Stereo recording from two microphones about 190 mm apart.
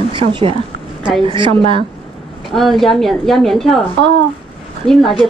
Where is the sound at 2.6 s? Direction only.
Centre (ahead or behind).